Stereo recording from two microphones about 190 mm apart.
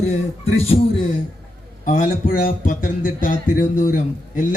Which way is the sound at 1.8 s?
45° left (ahead or behind).